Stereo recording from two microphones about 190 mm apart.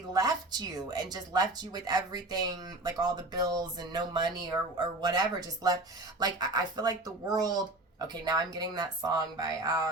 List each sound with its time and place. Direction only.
0.1 s speech: 20° right (ahead or behind)